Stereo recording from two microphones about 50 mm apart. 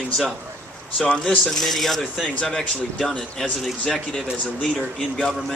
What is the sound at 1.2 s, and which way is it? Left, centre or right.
Speech, centre.